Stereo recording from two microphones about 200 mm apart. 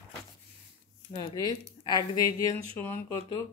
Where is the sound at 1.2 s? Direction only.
20° left (ahead or behind).